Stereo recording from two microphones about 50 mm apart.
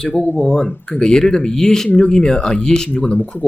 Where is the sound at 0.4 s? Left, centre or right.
Centre.